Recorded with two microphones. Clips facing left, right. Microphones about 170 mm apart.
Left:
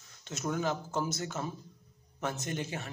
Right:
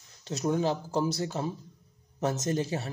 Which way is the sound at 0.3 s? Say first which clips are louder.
Right 5 dB; 30° right (ahead or behind).